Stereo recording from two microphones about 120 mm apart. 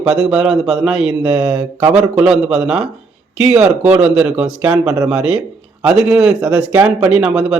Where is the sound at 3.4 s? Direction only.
70° right (ahead or behind).